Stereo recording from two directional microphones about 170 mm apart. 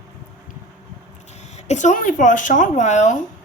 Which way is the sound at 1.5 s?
40° left (ahead or behind).